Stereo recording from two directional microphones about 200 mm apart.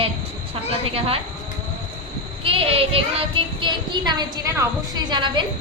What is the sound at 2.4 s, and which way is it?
Speech, 25° right (ahead or behind).